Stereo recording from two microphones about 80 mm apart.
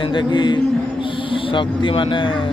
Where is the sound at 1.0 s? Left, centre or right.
Left.